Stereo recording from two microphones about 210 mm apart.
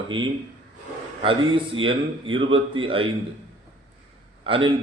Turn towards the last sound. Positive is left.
turn(degrees=-25)  # may be behind; listen again after turning